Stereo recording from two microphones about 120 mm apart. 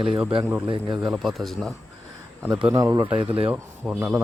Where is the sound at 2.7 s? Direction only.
25° right (ahead or behind).